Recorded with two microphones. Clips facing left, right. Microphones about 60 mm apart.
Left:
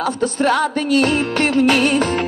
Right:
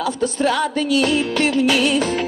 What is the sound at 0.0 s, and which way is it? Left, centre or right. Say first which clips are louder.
Music: left 2 dB; left.